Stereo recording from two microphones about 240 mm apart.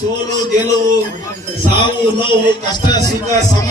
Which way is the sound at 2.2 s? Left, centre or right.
Centre.